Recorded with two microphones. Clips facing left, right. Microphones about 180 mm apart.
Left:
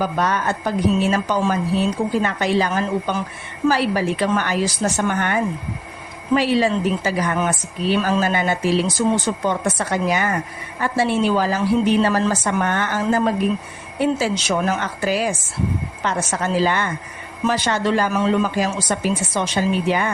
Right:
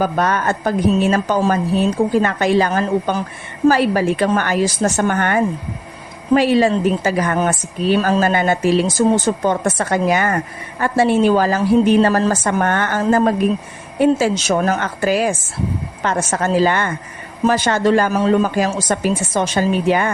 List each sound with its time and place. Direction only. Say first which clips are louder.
0.0 s speech: right 3 dB; 50° right (ahead or behind)
18.1 s speech: right 3 dB; 40° right (ahead or behind)